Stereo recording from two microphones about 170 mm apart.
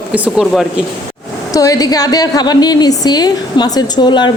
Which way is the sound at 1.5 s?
20° left (ahead or behind).